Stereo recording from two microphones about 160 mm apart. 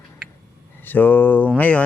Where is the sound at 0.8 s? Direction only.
10° left (ahead or behind).